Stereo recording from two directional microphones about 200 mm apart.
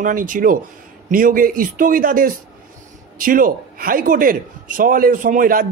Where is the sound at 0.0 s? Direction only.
40° right (ahead or behind).